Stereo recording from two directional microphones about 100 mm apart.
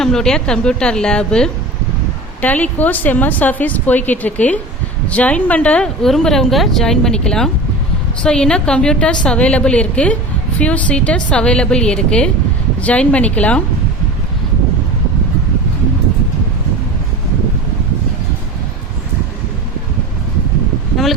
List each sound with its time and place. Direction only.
0.0 s a woman's voice: 5° left (ahead or behind)